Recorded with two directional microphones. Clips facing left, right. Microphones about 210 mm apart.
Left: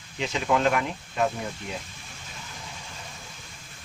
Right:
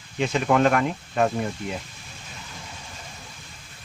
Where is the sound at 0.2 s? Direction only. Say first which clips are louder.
Right 4 dB; 55° right (ahead or behind).